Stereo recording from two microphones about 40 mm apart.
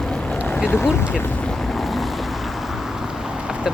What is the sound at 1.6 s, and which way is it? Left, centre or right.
Boat, centre.